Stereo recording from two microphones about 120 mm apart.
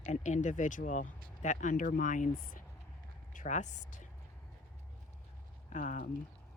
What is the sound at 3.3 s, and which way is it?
Speech, 90° left.